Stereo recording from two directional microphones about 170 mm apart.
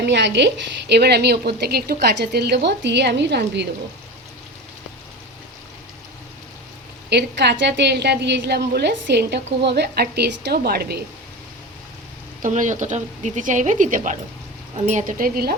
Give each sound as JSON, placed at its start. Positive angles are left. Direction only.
{"t": 0.0, "sound": "a woman's voice", "side_deg": -90}
{"t": 7.1, "sound": "a woman's voice", "side_deg": -80}
{"t": 12.4, "sound": "speech", "side_deg": -45}